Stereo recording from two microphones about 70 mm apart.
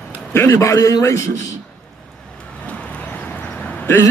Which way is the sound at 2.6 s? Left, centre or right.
Centre.